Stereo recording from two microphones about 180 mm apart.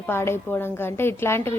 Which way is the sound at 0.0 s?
15° left (ahead or behind).